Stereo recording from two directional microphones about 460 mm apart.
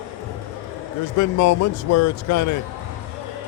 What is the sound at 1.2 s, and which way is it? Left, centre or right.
Speech, left.